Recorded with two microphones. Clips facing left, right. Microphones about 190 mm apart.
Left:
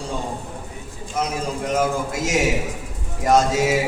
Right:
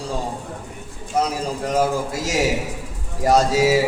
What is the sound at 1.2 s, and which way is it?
A man's voice, 35° right (ahead or behind).